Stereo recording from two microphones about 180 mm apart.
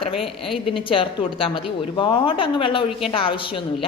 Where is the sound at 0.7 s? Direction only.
30° left (ahead or behind).